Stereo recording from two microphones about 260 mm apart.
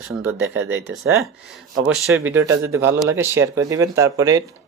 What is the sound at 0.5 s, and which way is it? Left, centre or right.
Speech, right.